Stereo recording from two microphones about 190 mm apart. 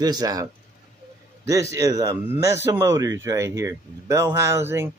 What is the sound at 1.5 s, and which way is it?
Speech, 15° right (ahead or behind).